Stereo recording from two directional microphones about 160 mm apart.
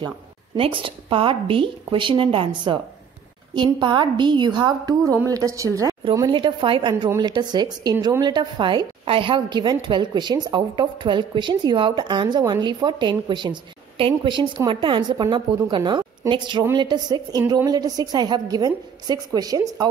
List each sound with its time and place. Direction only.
0.6 s a woman's voice: 35° right (ahead or behind)
6.2 s a woman's voice: 30° right (ahead or behind)